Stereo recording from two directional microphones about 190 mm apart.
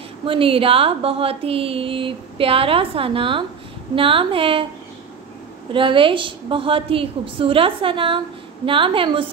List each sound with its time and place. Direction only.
0.2 s a woman's voice: 30° right (ahead or behind)
5.7 s a woman's voice: 25° right (ahead or behind)